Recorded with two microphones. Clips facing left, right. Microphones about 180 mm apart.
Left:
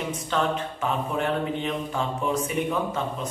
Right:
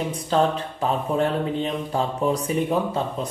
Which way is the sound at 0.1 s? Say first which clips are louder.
Right 5 dB; 35° right (ahead or behind).